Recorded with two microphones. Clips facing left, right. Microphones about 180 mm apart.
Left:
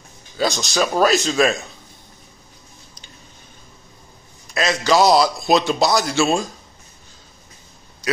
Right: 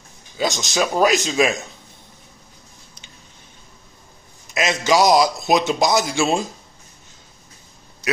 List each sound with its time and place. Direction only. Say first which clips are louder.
0.4 s a man's voice: left 1 dB; 20° right (ahead or behind)
4.6 s a man's voice: left 1 dB; 20° right (ahead or behind)